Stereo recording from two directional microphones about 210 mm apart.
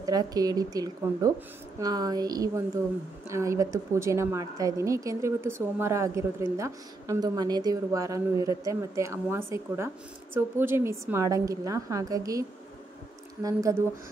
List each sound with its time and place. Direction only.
0.0 s a woman's voice: 20° right (ahead or behind)